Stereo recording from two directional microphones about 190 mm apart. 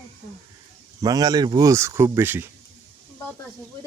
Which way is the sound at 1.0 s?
20° right (ahead or behind).